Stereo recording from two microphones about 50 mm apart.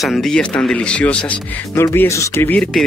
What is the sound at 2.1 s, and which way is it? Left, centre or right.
Speech, left.